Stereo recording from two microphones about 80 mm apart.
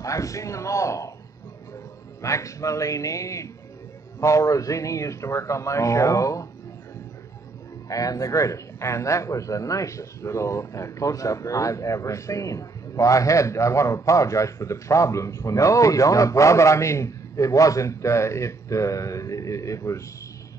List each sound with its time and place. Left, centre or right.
0.0 s a man's voice: left
2.2 s a man's voice: left
7.9 s a man's voice: left